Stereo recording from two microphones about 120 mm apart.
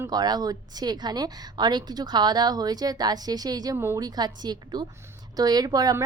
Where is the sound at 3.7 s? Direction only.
20° right (ahead or behind).